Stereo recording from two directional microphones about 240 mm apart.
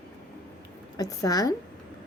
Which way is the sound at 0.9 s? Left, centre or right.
Centre.